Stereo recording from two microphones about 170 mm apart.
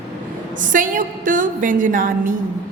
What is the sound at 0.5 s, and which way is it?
A woman's voice, 50° right (ahead or behind).